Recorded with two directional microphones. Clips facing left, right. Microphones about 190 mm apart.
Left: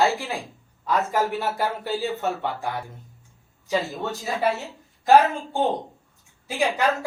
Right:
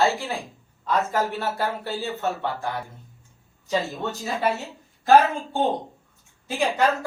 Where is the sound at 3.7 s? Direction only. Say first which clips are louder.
Even; centre (ahead or behind).